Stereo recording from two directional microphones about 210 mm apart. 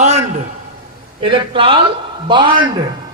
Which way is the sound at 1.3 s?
25° right (ahead or behind).